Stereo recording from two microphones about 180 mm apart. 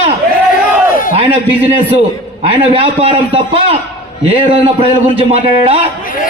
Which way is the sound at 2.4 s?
30° right (ahead or behind).